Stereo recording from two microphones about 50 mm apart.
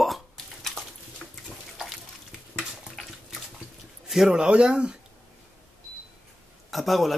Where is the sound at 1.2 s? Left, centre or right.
Centre.